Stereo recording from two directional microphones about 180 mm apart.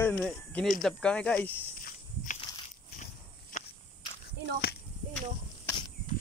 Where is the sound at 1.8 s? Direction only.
45° left (ahead or behind).